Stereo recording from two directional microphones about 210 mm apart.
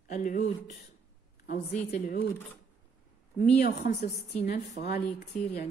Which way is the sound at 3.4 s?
45° left (ahead or behind).